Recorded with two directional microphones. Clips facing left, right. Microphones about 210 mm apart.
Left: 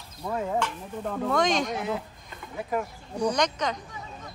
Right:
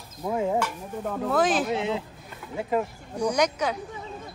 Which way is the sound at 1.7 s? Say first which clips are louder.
Right 3 dB; 25° right (ahead or behind).